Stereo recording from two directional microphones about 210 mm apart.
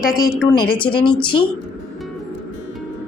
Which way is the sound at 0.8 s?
25° left (ahead or behind).